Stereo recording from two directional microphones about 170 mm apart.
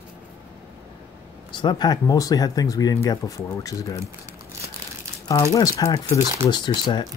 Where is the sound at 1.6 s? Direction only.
25° left (ahead or behind).